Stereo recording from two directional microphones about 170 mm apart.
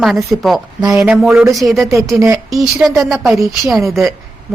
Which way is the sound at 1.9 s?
20° right (ahead or behind).